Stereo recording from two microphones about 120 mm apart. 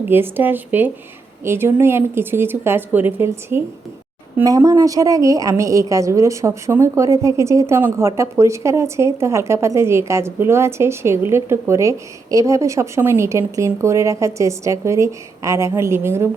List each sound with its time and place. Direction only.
0.1 s speech: 15° right (ahead or behind)
4.4 s speech: 30° right (ahead or behind)